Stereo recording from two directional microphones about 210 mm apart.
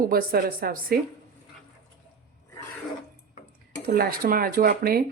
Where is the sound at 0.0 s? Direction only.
45° right (ahead or behind).